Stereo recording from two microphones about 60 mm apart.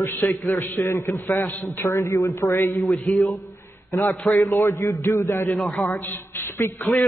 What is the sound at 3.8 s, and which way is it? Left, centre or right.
A man's voice, left.